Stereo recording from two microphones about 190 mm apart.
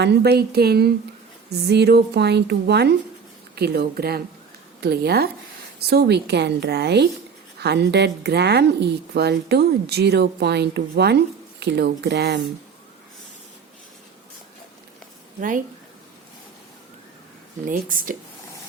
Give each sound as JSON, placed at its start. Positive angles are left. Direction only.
{"t": 0.0, "sound": "a woman's voice", "side_deg": -60}
{"t": 15.4, "sound": "speech", "side_deg": -45}
{"t": 17.7, "sound": "speech", "side_deg": -45}